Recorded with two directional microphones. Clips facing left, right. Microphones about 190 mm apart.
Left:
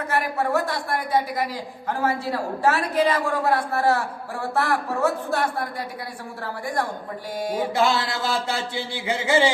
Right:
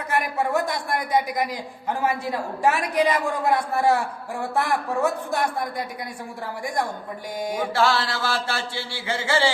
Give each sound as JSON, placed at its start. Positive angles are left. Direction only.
{"t": 0.1, "sound": "a woman's voice", "side_deg": -15}
{"t": 7.3, "sound": "a woman's voice", "side_deg": -15}
{"t": 7.7, "sound": "mantra", "side_deg": 20}